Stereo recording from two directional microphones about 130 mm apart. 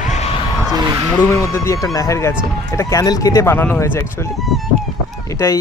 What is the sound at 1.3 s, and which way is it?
Speech, 25° left (ahead or behind).